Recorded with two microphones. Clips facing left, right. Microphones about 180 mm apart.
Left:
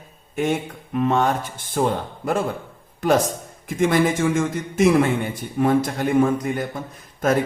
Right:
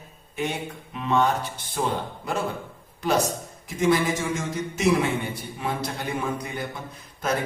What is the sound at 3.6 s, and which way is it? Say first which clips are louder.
A man's voice: left 3 dB; 55° left (ahead or behind).